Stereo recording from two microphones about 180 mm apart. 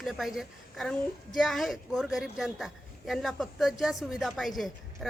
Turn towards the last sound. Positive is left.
turn(degrees=0)  # may be behind; listen again after turning